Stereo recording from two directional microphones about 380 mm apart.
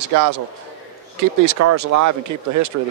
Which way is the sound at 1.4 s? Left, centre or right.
Right.